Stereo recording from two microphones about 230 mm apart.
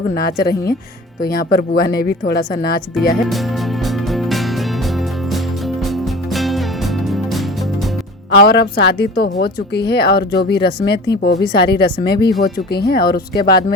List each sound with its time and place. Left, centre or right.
0.1 s speech: left
3.8 s music: centre
5.9 s music: centre
8.4 s speech: left